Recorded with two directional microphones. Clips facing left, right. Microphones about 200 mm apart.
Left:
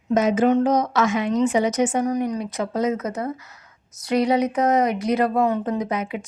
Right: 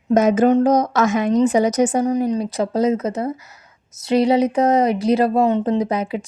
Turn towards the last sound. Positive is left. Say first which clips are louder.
# right 5 dB
turn(degrees=-35)  # may be behind; listen again after turning